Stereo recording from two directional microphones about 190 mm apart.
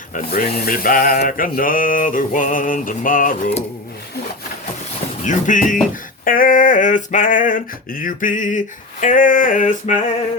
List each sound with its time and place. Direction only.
0.1 s male singing: 50° left (ahead or behind)
5.2 s male singing: 40° left (ahead or behind)